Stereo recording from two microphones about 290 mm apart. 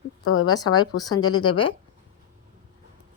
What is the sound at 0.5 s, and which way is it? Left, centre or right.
Speech, centre.